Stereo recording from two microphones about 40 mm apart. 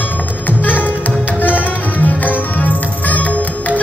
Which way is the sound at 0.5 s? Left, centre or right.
Left.